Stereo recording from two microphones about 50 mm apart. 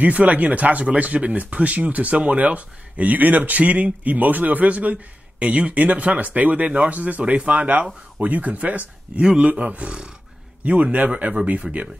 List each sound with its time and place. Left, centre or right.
0.0 s speech: right
9.2 s a man's voice: centre
9.5 s speech: right